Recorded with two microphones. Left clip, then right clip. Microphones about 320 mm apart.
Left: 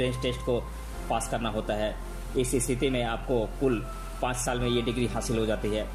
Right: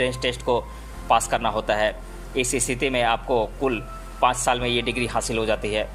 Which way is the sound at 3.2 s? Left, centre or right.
Right.